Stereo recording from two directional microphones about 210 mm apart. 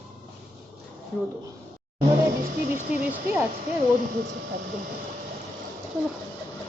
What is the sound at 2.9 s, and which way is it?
Speech, 5° right (ahead or behind).